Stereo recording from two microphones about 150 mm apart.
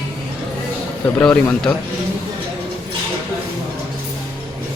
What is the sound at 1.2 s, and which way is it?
Speech, 10° left (ahead or behind).